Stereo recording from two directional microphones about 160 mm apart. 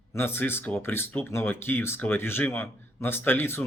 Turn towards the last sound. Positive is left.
turn(degrees=15)  # may be behind; listen again after turning